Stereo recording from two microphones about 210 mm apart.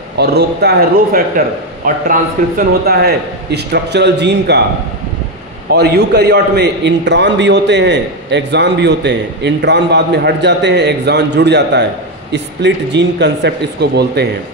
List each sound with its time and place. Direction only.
0.2 s a man's voice: 50° right (ahead or behind)
2.8 s a man's voice: 50° right (ahead or behind)
5.7 s a man's voice: 50° right (ahead or behind)